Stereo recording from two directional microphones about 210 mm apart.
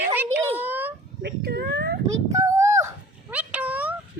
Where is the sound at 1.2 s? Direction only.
50° right (ahead or behind).